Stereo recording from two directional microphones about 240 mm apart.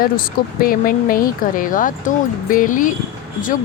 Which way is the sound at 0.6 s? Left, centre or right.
Left.